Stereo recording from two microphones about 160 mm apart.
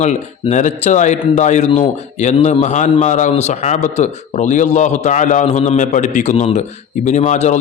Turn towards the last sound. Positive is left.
turn(degrees=45)  # may be behind; listen again after turning